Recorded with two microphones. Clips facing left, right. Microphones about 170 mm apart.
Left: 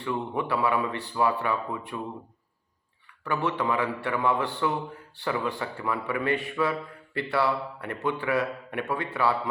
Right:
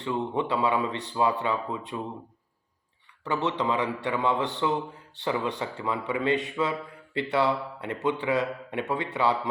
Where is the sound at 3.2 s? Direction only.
20° right (ahead or behind).